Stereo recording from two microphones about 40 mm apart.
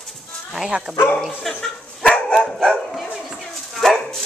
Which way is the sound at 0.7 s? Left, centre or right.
Right.